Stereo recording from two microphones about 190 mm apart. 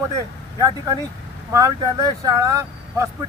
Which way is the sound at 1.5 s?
20° right (ahead or behind).